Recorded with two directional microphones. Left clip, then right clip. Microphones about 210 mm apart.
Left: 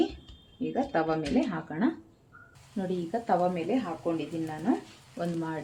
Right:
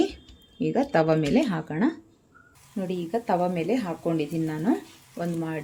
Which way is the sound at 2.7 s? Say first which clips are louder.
Right 3 dB; 25° right (ahead or behind).